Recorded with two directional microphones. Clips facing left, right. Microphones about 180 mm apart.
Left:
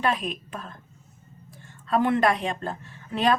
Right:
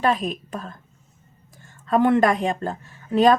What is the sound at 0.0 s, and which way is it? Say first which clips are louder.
A woman's voice: right 4 dB; 40° right (ahead or behind).